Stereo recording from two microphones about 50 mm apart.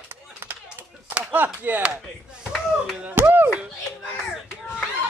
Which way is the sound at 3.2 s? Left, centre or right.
Right.